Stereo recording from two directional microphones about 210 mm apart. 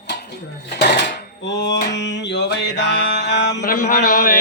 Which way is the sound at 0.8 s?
50° left (ahead or behind).